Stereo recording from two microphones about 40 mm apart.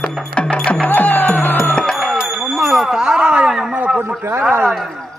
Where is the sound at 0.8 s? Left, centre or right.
Left.